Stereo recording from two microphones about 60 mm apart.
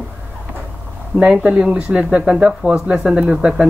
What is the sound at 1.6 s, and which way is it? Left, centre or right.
Speech, centre.